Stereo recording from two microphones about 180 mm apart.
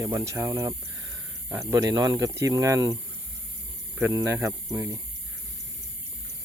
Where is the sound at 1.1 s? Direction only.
Centre (ahead or behind).